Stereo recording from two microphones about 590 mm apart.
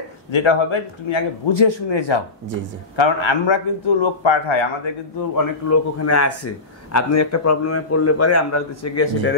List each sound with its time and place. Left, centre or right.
0.3 s a man's voice: left
5.3 s a man's voice: left